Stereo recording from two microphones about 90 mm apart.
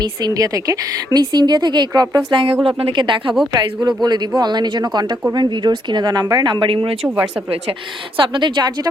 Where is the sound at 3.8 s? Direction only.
50° right (ahead or behind); by 7.1 s 85° right.